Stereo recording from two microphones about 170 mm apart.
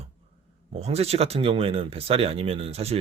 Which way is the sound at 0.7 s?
40° right (ahead or behind).